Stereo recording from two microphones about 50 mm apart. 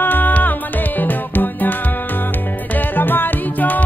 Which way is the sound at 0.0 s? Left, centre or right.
Left.